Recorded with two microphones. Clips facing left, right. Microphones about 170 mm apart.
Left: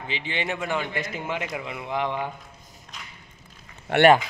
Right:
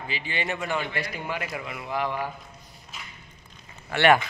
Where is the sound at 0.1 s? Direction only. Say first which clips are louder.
Left 2 dB; 20° left (ahead or behind).